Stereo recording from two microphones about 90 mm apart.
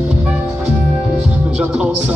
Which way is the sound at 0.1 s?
10° right (ahead or behind).